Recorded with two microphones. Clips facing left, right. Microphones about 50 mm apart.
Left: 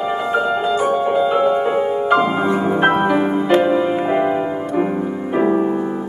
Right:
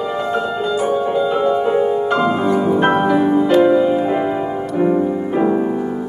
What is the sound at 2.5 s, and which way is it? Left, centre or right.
Music, left.